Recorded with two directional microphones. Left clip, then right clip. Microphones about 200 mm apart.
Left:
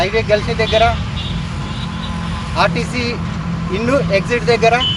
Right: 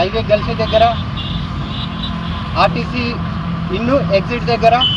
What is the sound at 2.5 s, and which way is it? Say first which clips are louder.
Speech: right 1 dB; 15° left (ahead or behind).